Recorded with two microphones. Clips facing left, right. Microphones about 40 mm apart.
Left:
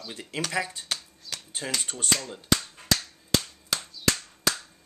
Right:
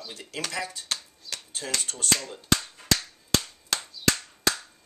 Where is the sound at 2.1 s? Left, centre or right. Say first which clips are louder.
Even; centre.